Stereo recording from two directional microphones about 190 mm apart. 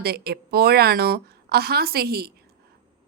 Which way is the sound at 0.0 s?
55° right (ahead or behind).